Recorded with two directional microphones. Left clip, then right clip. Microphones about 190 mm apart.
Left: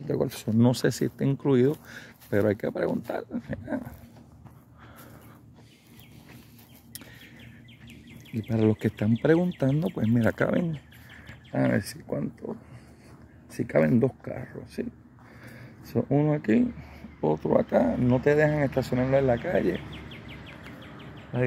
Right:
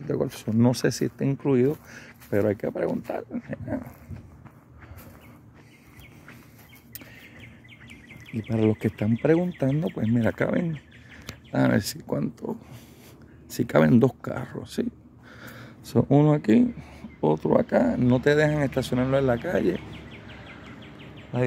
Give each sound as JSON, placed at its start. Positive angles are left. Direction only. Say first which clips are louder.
{"t": 0.0, "sound": "speech", "louder": "right 1 dB", "side_deg": -5}
{"t": 8.4, "sound": "speech", "louder": "right 1 dB", "side_deg": -10}
{"t": 11.5, "sound": "speech", "louder": "right 3 dB", "side_deg": -25}
{"t": 13.6, "sound": "speech", "louder": "right 3 dB", "side_deg": -30}
{"t": 16.0, "sound": "speech", "louder": "right 5 dB", "side_deg": -30}
{"t": 18.9, "sound": "speech", "louder": "even", "side_deg": -20}